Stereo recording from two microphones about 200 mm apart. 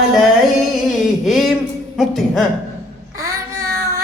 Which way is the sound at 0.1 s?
Centre (ahead or behind).